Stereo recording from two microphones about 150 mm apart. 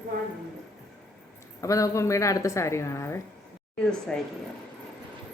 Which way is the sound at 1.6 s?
20° left (ahead or behind).